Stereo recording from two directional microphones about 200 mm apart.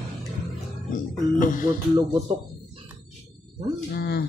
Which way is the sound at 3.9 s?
55° left (ahead or behind).